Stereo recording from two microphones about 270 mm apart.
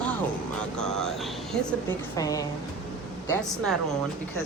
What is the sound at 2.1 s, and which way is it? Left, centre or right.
A woman's voice, centre.